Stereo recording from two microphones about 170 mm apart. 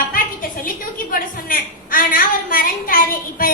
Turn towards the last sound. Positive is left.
turn(degrees=55)  # may be behind; listen again after turning